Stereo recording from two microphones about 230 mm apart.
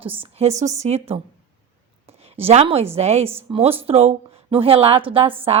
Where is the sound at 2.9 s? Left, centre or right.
Right.